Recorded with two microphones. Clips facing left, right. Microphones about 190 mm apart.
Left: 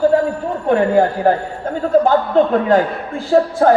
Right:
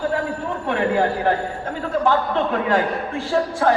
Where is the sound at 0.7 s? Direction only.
40° left (ahead or behind).